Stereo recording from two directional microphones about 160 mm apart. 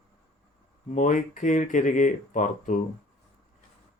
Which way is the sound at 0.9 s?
50° left (ahead or behind).